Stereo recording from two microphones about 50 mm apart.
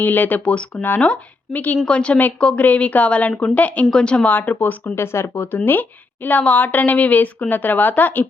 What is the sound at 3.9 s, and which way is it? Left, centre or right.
Speech, centre.